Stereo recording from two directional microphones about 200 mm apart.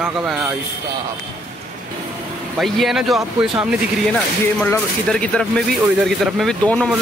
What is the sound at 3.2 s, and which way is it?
Speech, 25° right (ahead or behind).